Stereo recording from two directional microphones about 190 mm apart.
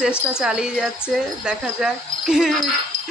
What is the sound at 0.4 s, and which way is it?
Speech, 5° right (ahead or behind).